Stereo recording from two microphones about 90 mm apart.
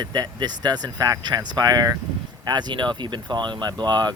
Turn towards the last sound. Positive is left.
turn(degrees=-55)  # may be behind; listen again after turning